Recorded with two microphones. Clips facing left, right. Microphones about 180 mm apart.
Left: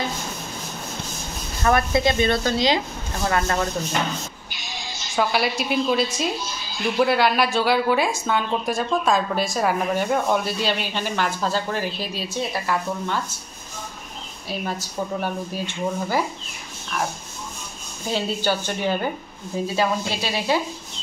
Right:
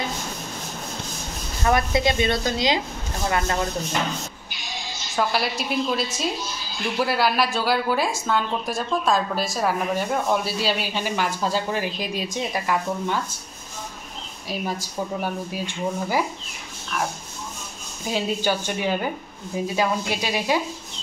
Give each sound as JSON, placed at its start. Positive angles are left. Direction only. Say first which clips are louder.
{"t": 1.6, "sound": "speech", "louder": "left 1 dB", "side_deg": -20}
{"t": 5.1, "sound": "a woman's voice", "louder": "left 2 dB", "side_deg": 0}
{"t": 14.8, "sound": "speech", "louder": "left 1 dB", "side_deg": -10}
{"t": 18.1, "sound": "speech", "louder": "even", "side_deg": -10}